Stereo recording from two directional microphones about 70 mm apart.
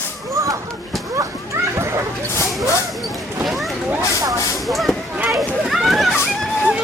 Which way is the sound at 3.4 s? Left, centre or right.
Centre.